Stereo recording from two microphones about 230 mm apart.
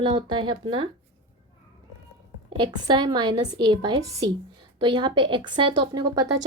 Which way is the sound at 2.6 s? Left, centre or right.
Centre.